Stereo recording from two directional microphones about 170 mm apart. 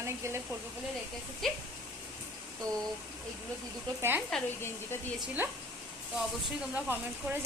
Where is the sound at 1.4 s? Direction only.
Centre (ahead or behind).